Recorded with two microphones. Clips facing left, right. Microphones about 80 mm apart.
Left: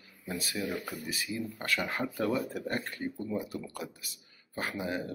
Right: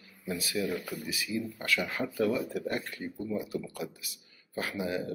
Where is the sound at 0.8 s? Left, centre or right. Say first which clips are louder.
Even; left.